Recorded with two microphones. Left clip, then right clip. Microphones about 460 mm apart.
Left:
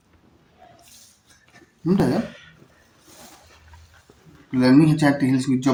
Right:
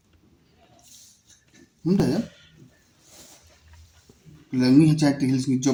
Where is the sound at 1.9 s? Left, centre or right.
Right.